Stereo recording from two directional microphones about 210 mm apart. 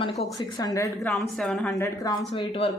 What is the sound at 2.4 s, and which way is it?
Speech, 25° left (ahead or behind).